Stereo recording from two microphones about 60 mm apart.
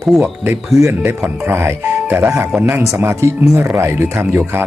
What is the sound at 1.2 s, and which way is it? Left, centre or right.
Speech, right.